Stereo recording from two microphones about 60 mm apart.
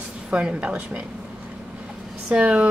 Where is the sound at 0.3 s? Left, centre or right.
Centre.